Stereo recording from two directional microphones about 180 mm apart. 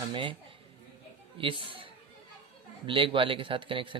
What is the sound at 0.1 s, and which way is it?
Speech, 25° right (ahead or behind).